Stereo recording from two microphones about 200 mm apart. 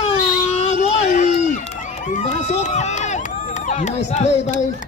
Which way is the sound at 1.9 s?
40° left (ahead or behind).